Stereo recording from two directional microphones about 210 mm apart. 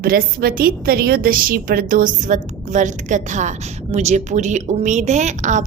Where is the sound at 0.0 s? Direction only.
45° right (ahead or behind).